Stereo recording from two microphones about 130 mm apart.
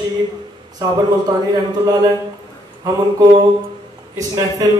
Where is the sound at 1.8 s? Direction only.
30° right (ahead or behind).